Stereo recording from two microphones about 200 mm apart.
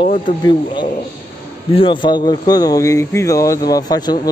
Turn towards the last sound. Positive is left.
turn(degrees=20)  # may be behind; listen again after turning